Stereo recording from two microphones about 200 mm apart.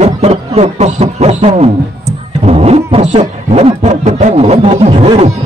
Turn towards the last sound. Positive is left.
turn(degrees=-30)  # may be behind; listen again after turning